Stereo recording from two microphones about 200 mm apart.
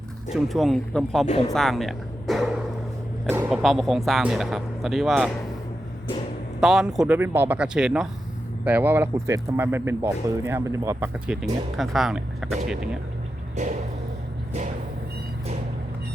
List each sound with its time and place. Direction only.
0.3 s speech: centre (ahead or behind)
1.5 s music: centre (ahead or behind)
3.2 s a sound: 10° right (ahead or behind)
3.6 s speech: centre (ahead or behind)
6.6 s speech: centre (ahead or behind)
13.6 s a sound: 35° right (ahead or behind)